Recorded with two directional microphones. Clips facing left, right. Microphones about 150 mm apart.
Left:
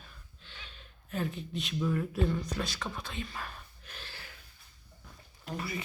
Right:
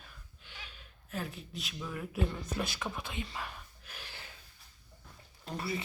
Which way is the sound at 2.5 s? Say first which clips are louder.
Even; 15° right (ahead or behind).